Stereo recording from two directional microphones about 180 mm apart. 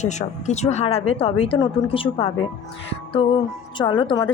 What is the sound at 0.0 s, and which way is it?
Speech, 40° left (ahead or behind).